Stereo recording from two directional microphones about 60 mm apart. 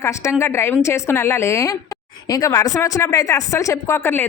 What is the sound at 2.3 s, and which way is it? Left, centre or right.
Speech, left.